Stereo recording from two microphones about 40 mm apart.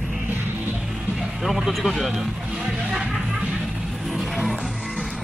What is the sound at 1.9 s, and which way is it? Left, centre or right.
Speech, centre.